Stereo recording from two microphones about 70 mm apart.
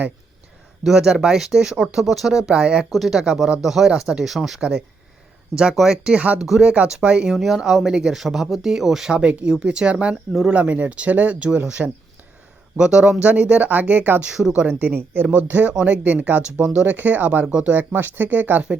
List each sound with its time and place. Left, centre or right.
0.9 s speech: centre; by 14.2 s right
14.3 s speech: centre